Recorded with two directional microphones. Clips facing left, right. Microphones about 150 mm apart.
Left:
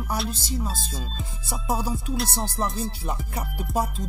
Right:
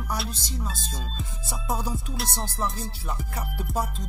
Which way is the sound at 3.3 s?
15° left (ahead or behind).